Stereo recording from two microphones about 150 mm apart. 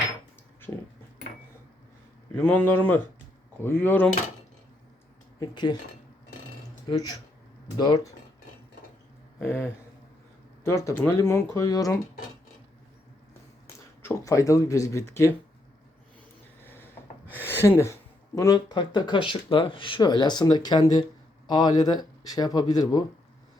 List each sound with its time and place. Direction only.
2.4 s speech: 10° left (ahead or behind)
5.4 s speech: 30° left (ahead or behind)
6.8 s speech: 25° left (ahead or behind)
9.4 s speech: 15° left (ahead or behind)
14.0 s speech: 20° left (ahead or behind)
16.6 s speech: 15° left (ahead or behind)